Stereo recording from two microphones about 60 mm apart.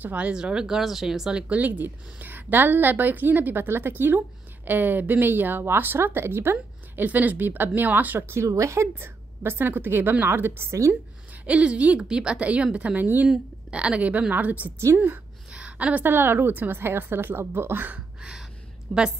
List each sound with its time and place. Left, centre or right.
0.0 s speech: right
0.3 s speech: centre
1.5 s speech: right
8.2 s speech: right
8.5 s speech: right
9.0 s a woman's voice: right
11.4 s speech: right
13.3 s a woman's voice: centre
15.5 s a sound: right
16.1 s speech: right
17.9 s a sound: centre
18.9 s a woman's voice: centre